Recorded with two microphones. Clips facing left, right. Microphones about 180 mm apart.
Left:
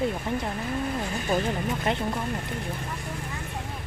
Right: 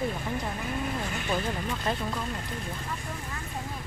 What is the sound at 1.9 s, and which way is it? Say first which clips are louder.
Speech: left 3 dB; 20° left (ahead or behind).